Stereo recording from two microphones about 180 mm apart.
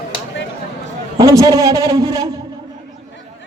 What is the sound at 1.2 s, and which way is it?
A man's voice, 20° right (ahead or behind).